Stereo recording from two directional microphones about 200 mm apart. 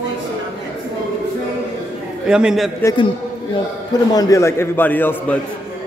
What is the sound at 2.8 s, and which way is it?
Speech, 15° left (ahead or behind).